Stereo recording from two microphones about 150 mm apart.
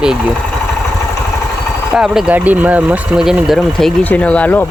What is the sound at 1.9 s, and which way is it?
Speech, 5° right (ahead or behind).